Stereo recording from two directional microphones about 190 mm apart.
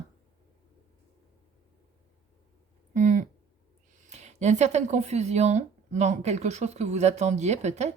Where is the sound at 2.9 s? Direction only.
40° right (ahead or behind).